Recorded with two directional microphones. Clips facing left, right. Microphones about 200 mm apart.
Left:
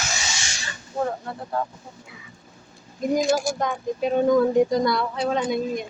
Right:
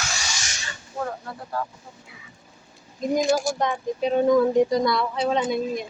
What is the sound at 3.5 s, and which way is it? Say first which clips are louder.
Speech: right 1 dB; centre (ahead or behind).